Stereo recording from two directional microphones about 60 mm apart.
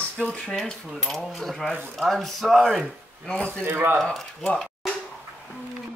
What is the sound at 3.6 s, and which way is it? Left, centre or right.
Speech, right.